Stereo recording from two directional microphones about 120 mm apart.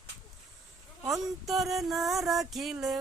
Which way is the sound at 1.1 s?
Centre (ahead or behind).